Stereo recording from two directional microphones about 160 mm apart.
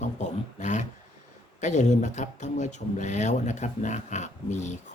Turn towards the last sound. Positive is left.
turn(degrees=50)  # may be behind; listen again after turning